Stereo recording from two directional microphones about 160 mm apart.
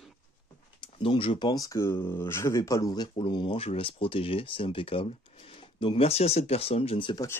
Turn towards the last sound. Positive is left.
turn(degrees=30)  # may be behind; listen again after turning